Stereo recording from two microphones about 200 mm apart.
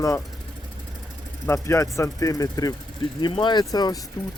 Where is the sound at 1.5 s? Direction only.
15° left (ahead or behind).